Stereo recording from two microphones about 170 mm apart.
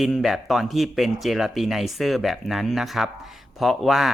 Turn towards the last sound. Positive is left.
turn(degrees=0)  # may be behind; listen again after turning